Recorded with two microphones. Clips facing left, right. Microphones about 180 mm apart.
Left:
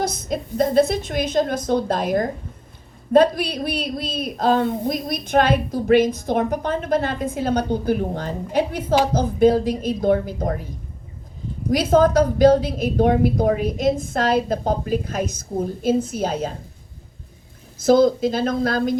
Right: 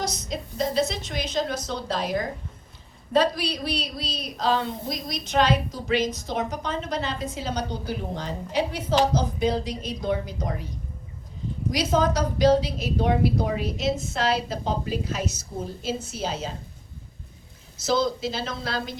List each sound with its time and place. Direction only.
0.0 s speech: 55° left (ahead or behind)
11.7 s speech: 50° left (ahead or behind)
17.8 s speech: 50° left (ahead or behind)